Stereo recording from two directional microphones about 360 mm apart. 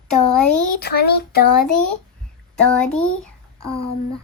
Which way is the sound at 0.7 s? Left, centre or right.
Left.